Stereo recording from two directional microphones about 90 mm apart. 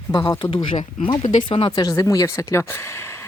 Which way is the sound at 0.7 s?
80° left.